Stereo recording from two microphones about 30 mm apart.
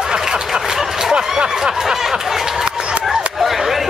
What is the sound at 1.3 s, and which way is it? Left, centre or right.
Speech, right.